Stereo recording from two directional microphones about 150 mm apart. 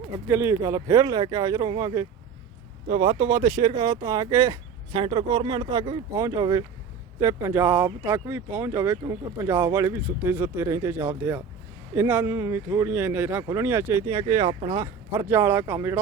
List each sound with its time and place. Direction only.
0.3 s speech: 20° right (ahead or behind); by 3.2 s 35° right (ahead or behind)
3.2 s speech: 25° right (ahead or behind)
4.9 s speech: 35° right (ahead or behind)
6.1 s speech: 25° right (ahead or behind)
15.1 s speech: 20° right (ahead or behind)